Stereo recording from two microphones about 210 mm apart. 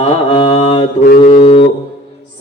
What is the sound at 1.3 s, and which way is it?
Mantra, 25° left (ahead or behind).